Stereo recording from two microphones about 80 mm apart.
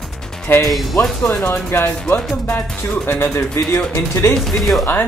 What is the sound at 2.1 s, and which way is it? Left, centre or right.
Speech, centre.